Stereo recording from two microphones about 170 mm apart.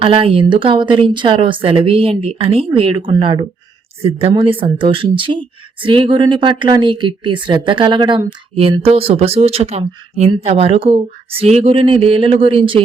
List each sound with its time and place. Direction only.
0.0 s speech: 35° right (ahead or behind)